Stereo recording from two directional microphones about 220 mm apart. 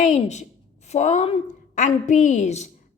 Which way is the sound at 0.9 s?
30° left (ahead or behind).